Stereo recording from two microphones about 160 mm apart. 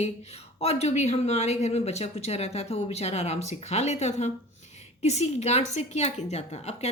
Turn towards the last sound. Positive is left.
turn(degrees=40)  # may be behind; listen again after turning